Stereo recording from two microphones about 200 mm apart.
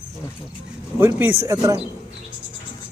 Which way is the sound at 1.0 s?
10° right (ahead or behind).